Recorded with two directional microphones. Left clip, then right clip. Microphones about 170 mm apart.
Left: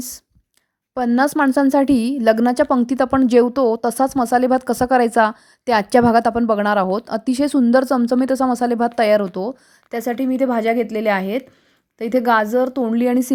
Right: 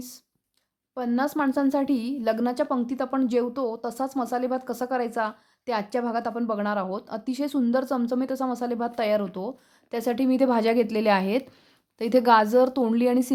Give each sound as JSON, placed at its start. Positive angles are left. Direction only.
{"t": 0.9, "sound": "a woman's voice", "side_deg": 50}
{"t": 9.9, "sound": "a woman's voice", "side_deg": 20}